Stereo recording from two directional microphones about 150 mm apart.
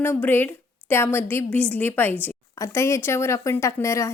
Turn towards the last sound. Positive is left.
turn(degrees=20)  # may be behind; listen again after turning